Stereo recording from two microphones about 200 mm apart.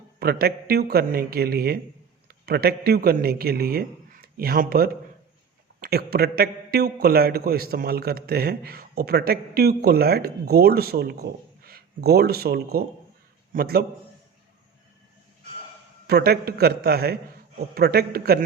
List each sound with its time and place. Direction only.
0.2 s a man's voice: 50° right (ahead or behind)
16.0 s a man's voice: 50° right (ahead or behind)